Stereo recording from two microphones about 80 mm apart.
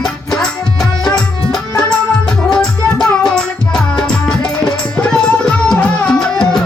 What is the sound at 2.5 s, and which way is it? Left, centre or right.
Music, centre.